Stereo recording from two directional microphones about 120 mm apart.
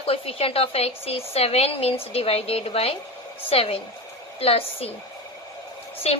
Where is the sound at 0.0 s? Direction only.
55° left (ahead or behind).